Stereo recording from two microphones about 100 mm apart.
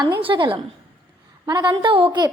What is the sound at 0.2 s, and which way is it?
Speech, 60° right (ahead or behind).